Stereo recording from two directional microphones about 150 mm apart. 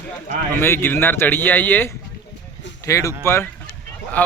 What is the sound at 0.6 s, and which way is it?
A man's voice, 15° left (ahead or behind).